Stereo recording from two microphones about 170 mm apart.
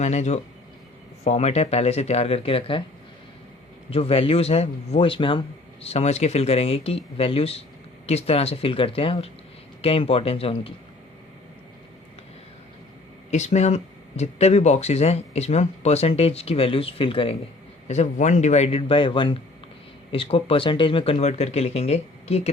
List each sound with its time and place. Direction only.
0.0 s speech: 40° left (ahead or behind)
3.8 s speech: 35° left (ahead or behind)
13.3 s speech: 40° left (ahead or behind)